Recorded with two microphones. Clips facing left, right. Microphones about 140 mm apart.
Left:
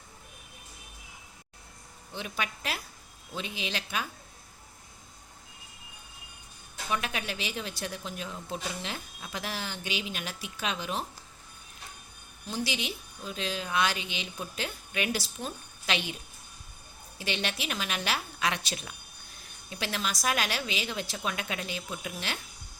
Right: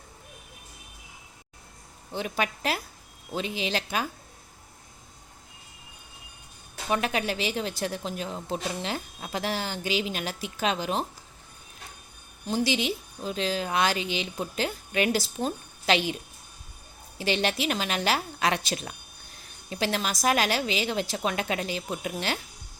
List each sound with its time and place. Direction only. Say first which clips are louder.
2.1 s speech: right 6 dB; 40° right (ahead or behind)
6.8 s speech: right 6 dB; 35° right (ahead or behind)
12.7 s speech: right 7 dB; 30° right (ahead or behind)
17.2 s speech: right 7 dB; 35° right (ahead or behind)